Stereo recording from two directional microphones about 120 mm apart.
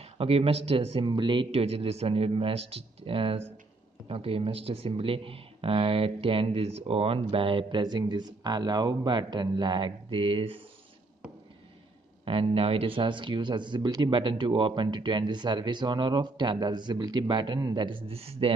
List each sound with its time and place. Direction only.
0.0 s speech: 55° right (ahead or behind)
12.3 s speech: 50° right (ahead or behind)